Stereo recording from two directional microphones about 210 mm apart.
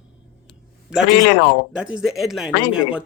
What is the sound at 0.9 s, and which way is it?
Speech, 5° right (ahead or behind).